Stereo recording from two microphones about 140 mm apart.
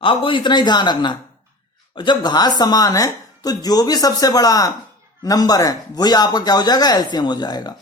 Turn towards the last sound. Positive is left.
turn(degrees=30)  # may be behind; listen again after turning